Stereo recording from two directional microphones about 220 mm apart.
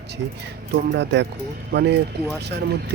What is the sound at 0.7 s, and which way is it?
Speech, 50° right (ahead or behind).